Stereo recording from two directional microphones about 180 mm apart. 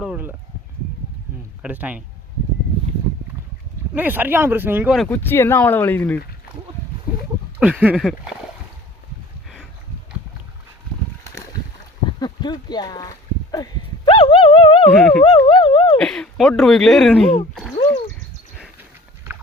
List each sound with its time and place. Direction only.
0.0 s speech: 10° right (ahead or behind)
1.6 s speech: 10° right (ahead or behind)
3.9 s speech: 10° right (ahead or behind)
4.9 s speech: 10° left (ahead or behind)
7.6 s speech: 5° right (ahead or behind)
12.2 s speech: 25° left (ahead or behind)
13.5 s dog: 25° left (ahead or behind)
15.2 s speech: 25° left (ahead or behind)
16.0 s speech: 5° left (ahead or behind)